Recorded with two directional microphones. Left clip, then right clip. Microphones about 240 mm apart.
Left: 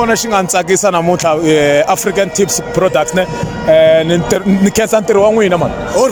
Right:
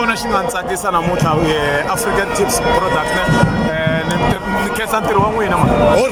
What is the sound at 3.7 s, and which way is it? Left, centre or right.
Speech, left.